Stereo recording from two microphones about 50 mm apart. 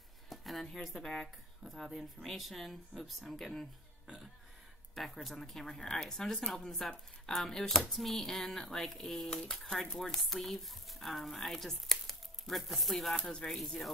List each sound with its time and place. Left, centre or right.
0.3 s a sound: centre
0.8 s speech: centre
4.9 s speech: centre
13.3 s speech: centre
13.7 s speech: centre